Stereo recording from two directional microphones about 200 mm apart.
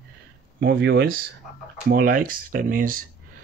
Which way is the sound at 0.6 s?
55° right (ahead or behind).